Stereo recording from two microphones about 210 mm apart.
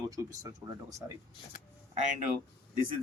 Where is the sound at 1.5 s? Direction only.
40° left (ahead or behind).